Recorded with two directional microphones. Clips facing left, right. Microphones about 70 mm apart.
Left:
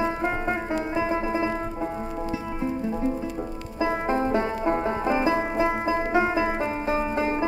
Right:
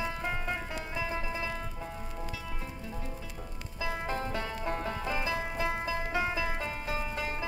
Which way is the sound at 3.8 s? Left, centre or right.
Left.